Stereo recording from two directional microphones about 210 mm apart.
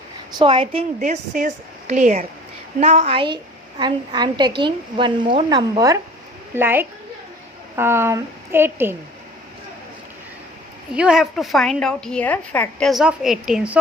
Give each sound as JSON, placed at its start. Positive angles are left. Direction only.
{"t": 0.3, "sound": "a woman's voice", "side_deg": -25}
{"t": 10.9, "sound": "a woman's voice", "side_deg": -5}